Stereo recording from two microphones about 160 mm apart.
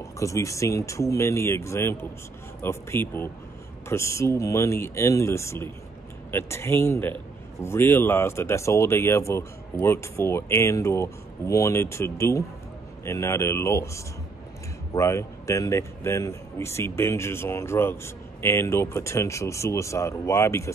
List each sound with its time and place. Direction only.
0.2 s speech: 20° left (ahead or behind)